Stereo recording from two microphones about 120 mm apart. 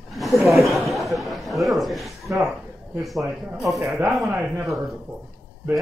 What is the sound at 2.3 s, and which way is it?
Speech, 15° right (ahead or behind).